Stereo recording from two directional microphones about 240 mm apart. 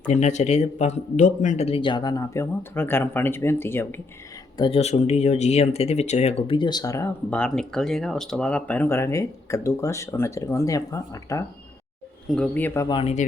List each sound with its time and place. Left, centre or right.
0.1 s speech: left; by 4.0 s centre
4.5 s speech: left